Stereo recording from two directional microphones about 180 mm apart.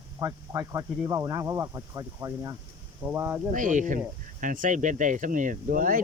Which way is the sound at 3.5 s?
45° right (ahead or behind).